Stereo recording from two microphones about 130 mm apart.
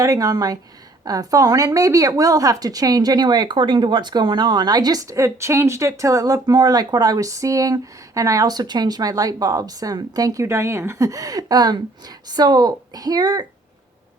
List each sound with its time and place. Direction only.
0.0 s a woman's voice: 25° right (ahead or behind)